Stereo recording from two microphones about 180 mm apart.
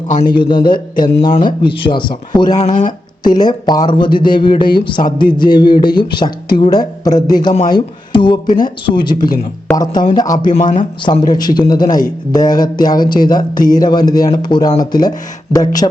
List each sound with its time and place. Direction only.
0.3 s speech: 25° left (ahead or behind)
2.6 s speech: 40° left (ahead or behind)
3.2 s speech: 25° left (ahead or behind)
10.6 s speech: 45° left (ahead or behind)
11.3 s speech: 25° left (ahead or behind)